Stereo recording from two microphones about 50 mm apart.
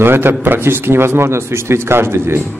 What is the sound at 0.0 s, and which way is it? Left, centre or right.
Speech, right.